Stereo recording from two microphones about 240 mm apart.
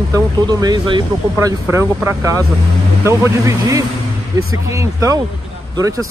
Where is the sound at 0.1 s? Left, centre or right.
Centre.